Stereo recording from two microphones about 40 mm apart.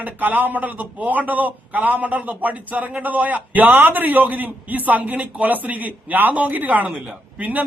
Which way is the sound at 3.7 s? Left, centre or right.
Right.